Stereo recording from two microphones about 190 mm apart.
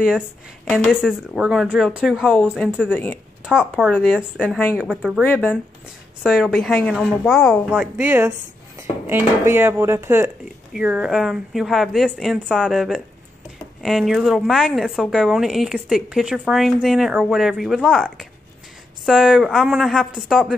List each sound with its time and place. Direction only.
0.7 s a woman's voice: 5° left (ahead or behind)
2.9 s speech: 10° left (ahead or behind)
3.4 s a woman's voice: 5° right (ahead or behind)
5.2 s speech: 10° left (ahead or behind)
6.2 s a woman's voice: centre (ahead or behind)